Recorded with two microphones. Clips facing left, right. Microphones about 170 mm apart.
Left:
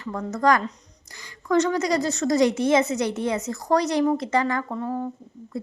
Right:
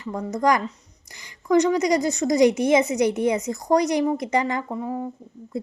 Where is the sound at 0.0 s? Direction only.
15° right (ahead or behind).